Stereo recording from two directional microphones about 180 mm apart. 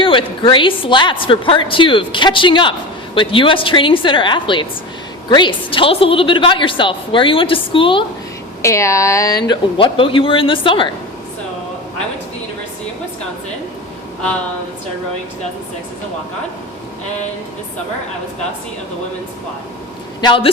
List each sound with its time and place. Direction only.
0.0 s a woman's voice: 30° left (ahead or behind)
8.6 s speech: 15° left (ahead or behind)
9.5 s a woman's voice: 30° left (ahead or behind)
20.2 s a woman's voice: 30° left (ahead or behind)